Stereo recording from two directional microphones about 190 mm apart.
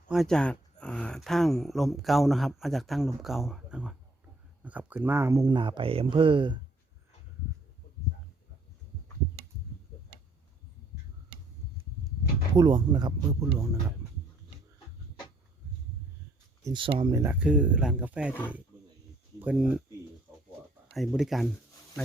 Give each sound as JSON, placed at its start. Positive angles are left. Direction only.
{"t": 0.1, "sound": "speech", "side_deg": 0}
{"t": 12.5, "sound": "speech", "side_deg": -20}
{"t": 16.6, "sound": "speech", "side_deg": -25}
{"t": 17.2, "sound": "speech", "side_deg": -5}
{"t": 19.4, "sound": "speech", "side_deg": -5}
{"t": 20.8, "sound": "speech", "side_deg": 0}